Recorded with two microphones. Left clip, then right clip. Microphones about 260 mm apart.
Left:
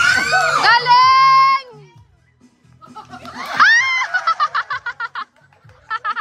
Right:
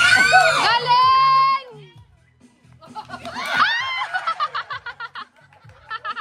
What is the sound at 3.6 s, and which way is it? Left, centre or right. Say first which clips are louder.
Snicker: left 9 dB; centre.